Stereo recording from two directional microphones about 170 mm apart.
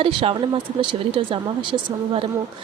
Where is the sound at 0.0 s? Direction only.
30° right (ahead or behind).